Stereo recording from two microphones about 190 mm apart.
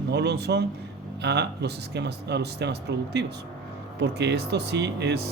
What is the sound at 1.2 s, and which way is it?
Speech, 60° right (ahead or behind).